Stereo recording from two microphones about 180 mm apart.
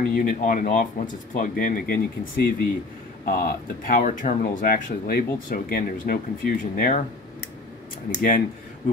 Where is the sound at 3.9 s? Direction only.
45° left (ahead or behind).